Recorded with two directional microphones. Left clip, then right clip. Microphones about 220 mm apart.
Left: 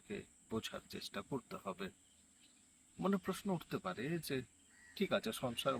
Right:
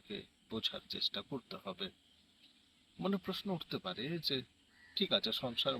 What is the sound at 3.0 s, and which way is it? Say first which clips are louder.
Speech: even; 5° left (ahead or behind).